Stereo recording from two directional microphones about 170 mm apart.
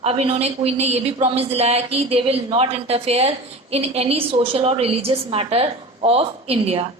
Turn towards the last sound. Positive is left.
turn(degrees=-35)  # may be behind; listen again after turning